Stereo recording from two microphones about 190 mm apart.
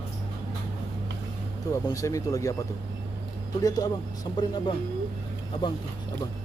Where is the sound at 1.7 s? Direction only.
15° left (ahead or behind).